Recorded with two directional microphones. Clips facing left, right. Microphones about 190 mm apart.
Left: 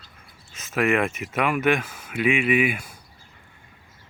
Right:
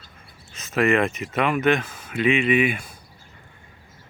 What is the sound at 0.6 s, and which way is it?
Speech, 5° left (ahead or behind).